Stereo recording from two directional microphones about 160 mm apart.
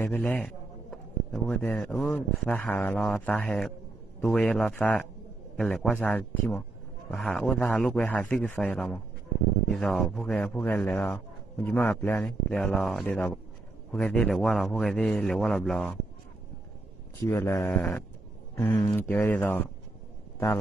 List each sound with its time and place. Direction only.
0.0 s a man's voice: 10° left (ahead or behind)
17.2 s speech: 15° left (ahead or behind)